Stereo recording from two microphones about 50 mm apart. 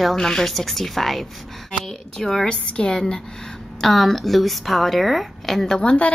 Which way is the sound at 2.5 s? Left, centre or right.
Left.